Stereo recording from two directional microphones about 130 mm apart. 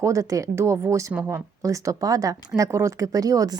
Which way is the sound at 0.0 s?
25° right (ahead or behind).